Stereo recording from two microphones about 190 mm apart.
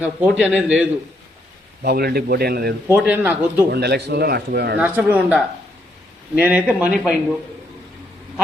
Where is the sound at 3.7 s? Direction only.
60° right (ahead or behind).